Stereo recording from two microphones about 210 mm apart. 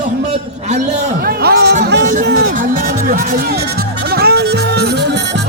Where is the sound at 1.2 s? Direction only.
45° right (ahead or behind).